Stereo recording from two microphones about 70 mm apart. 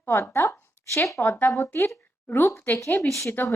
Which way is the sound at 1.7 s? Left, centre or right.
Left.